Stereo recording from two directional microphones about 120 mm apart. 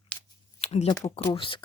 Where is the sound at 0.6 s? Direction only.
65° left (ahead or behind).